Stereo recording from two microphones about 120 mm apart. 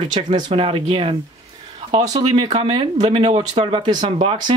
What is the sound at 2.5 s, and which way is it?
Speech, 35° right (ahead or behind).